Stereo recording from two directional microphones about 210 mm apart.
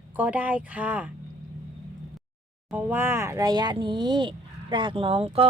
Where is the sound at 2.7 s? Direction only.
10° right (ahead or behind).